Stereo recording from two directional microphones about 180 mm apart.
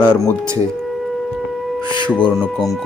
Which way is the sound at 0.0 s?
20° left (ahead or behind).